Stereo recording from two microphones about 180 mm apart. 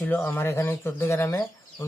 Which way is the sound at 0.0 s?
10° left (ahead or behind).